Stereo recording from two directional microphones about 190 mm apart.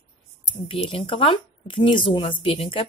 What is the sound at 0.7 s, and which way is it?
Speech, 30° left (ahead or behind).